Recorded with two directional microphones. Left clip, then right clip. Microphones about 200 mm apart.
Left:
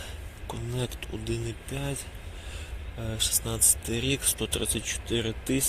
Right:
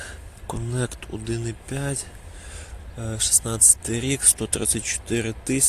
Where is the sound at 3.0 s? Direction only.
35° right (ahead or behind).